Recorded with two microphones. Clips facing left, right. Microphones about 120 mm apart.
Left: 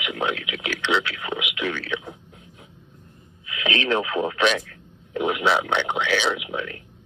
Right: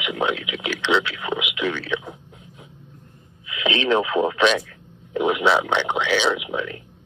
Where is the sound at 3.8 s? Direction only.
20° right (ahead or behind).